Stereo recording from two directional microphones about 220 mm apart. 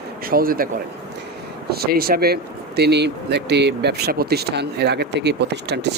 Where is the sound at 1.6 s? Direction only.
45° right (ahead or behind).